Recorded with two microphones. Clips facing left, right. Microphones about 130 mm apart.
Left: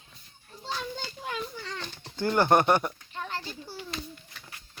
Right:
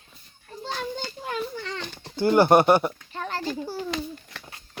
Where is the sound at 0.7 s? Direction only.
45° right (ahead or behind).